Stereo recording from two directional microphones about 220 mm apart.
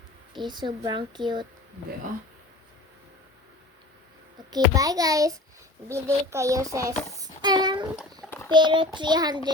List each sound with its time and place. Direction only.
0.3 s a woman's voice: 20° right (ahead or behind)
4.5 s a child's voice: 15° right (ahead or behind)
7.2 s a sound: 20° right (ahead or behind)
8.4 s a woman's voice: 20° right (ahead or behind)